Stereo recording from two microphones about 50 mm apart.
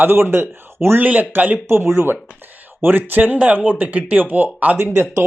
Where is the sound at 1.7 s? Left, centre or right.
Right.